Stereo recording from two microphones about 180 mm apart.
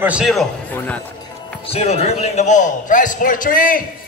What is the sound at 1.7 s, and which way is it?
A man's voice, 35° left (ahead or behind).